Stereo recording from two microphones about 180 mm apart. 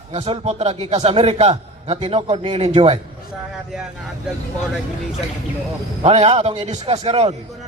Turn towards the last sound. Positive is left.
turn(degrees=-35)  # may be behind; listen again after turning